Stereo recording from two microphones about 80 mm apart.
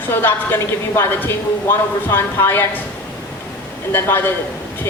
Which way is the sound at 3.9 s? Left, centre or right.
Left.